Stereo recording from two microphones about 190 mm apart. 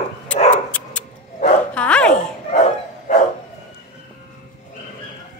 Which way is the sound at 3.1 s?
40° left (ahead or behind).